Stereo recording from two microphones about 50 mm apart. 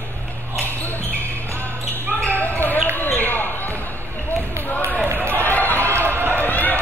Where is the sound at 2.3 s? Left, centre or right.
Left.